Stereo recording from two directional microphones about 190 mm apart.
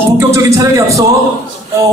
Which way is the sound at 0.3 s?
15° right (ahead or behind).